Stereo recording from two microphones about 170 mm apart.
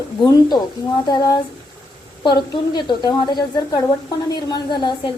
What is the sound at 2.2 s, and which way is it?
A woman's voice, 25° left (ahead or behind).